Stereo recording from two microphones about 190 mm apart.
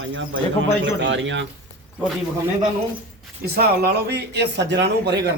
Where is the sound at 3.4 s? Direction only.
55° right (ahead or behind).